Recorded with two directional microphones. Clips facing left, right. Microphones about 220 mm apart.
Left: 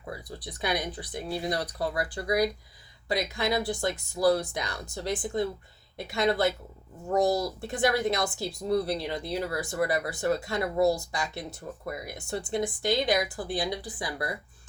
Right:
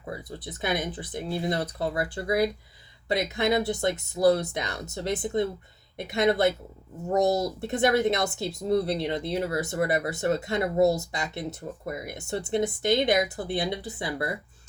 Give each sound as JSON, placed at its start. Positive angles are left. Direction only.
{"t": 0.0, "sound": "speech", "side_deg": -25}